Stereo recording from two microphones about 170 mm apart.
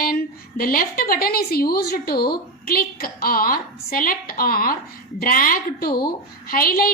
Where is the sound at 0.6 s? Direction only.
60° left (ahead or behind).